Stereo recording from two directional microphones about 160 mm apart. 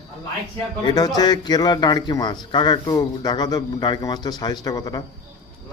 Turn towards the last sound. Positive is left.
turn(degrees=25)  # may be behind; listen again after turning